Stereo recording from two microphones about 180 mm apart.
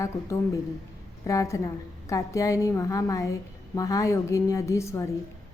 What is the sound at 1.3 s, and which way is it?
A woman's voice, 15° left (ahead or behind).